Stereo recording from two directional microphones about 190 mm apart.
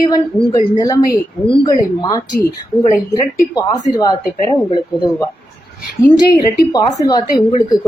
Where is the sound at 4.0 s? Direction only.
20° left (ahead or behind).